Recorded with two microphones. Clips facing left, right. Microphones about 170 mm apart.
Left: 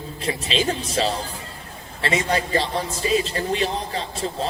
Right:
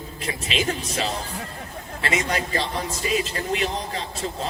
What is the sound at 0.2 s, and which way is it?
A man's voice, 30° left (ahead or behind).